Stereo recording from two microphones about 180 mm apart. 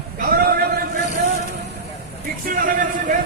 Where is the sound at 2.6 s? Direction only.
50° right (ahead or behind).